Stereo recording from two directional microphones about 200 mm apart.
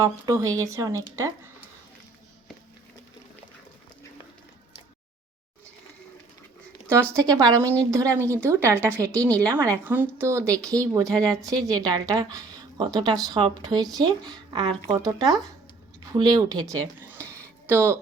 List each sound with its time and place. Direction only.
0.0 s speech: 15° right (ahead or behind)
6.8 s speech: 10° right (ahead or behind)